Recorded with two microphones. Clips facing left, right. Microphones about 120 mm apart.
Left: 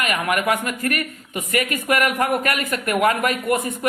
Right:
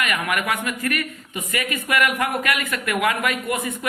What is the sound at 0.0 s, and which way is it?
A man's voice, 40° left (ahead or behind).